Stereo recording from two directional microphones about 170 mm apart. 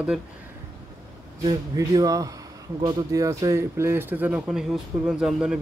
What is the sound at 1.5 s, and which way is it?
Speech, 20° right (ahead or behind).